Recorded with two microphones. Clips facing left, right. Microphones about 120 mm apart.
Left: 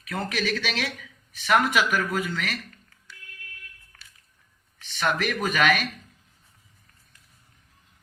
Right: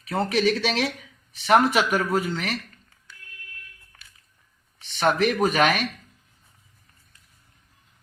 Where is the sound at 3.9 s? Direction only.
20° right (ahead or behind).